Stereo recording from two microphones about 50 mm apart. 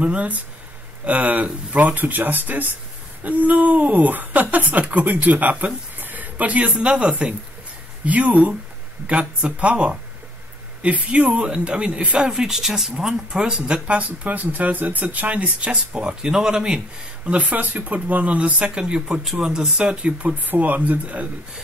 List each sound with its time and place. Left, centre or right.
0.0 s speech: right
5.9 s a sound: right
6.8 s speech: right
12.2 s speech: centre
13.8 s speech: right
17.3 s speech: right